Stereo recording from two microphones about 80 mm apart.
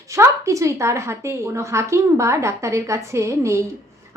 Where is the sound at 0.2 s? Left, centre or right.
Right.